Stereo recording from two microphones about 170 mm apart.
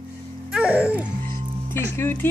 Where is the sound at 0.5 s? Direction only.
5° right (ahead or behind).